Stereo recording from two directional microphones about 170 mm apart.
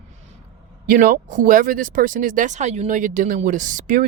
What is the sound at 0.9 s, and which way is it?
Speech, 55° right (ahead or behind).